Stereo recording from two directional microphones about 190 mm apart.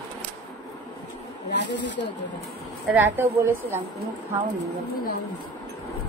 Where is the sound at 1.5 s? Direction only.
65° left (ahead or behind).